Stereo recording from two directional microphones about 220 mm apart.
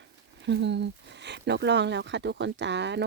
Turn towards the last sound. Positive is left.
turn(degrees=-50)  # may be behind; listen again after turning